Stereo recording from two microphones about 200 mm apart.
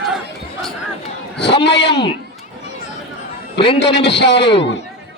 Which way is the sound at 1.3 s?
60° left (ahead or behind).